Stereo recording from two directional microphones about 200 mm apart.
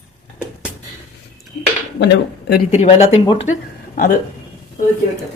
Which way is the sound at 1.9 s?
60° left (ahead or behind).